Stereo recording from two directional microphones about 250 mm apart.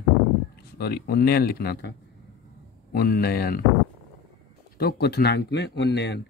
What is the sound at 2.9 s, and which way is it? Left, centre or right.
Speech, left.